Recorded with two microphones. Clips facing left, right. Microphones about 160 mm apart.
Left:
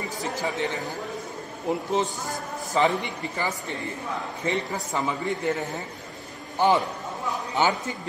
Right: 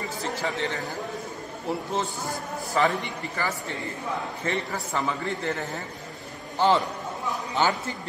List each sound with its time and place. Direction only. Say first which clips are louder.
0.2 s chatter: left 1 dB; 15° left (ahead or behind)
1.7 s a man's voice: left 3 dB; 20° left (ahead or behind)